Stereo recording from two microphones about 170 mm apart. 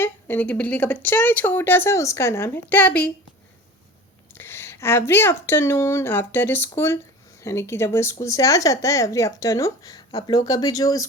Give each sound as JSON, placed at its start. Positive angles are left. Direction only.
{"t": 0.0, "sound": "speech", "side_deg": 10}
{"t": 4.4, "sound": "speech", "side_deg": 15}